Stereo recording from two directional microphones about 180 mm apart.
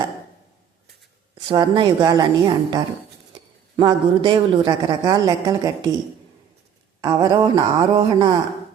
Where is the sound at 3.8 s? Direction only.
25° right (ahead or behind).